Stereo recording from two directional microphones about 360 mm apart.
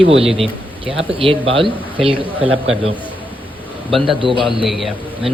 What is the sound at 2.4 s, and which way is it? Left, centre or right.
Speech, right.